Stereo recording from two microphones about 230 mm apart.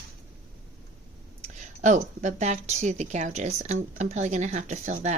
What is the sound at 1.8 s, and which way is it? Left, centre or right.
Speech, right.